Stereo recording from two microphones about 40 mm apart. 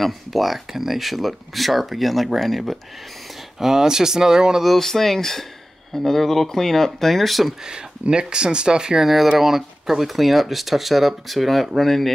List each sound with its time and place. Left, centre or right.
0.0 s speech: centre
3.5 s speech: centre
4.6 s speech: centre
8.1 s speech: right
9.0 s speech: centre